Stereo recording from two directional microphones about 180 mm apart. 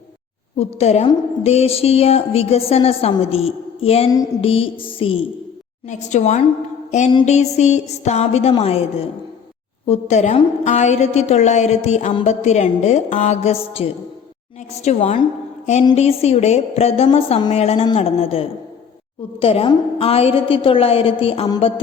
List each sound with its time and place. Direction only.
0.6 s a woman's voice: 35° left (ahead or behind)
5.9 s a woman's voice: 40° left (ahead or behind); by 21.6 s 25° left (ahead or behind)